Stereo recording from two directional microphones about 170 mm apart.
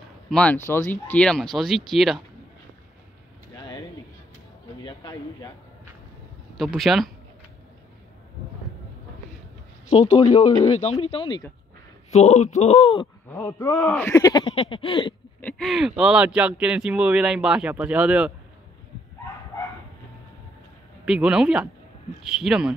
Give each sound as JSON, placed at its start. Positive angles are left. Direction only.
{"t": 0.3, "sound": "speech", "side_deg": 5}
{"t": 4.8, "sound": "speech", "side_deg": 20}
{"t": 6.5, "sound": "speech", "side_deg": 0}
{"t": 9.9, "sound": "speech", "side_deg": 40}
{"t": 12.1, "sound": "speech", "side_deg": 40}
{"t": 13.4, "sound": "speech", "side_deg": 15}
{"t": 15.4, "sound": "speech", "side_deg": 5}
{"t": 21.0, "sound": "speech", "side_deg": -5}